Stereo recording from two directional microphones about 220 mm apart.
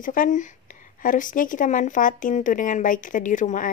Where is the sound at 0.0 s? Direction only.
35° left (ahead or behind).